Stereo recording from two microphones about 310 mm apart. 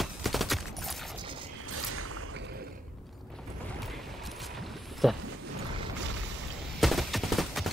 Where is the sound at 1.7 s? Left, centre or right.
Right.